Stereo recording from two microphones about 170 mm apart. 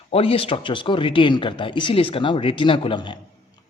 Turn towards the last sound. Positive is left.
turn(degrees=30)  # may be behind; listen again after turning